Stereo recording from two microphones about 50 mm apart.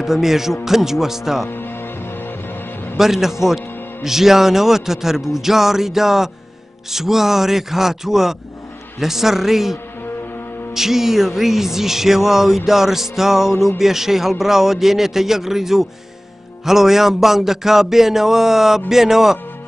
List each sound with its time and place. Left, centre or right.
0.0 s a man's voice: centre
1.5 s music: left
3.0 s a man's voice: centre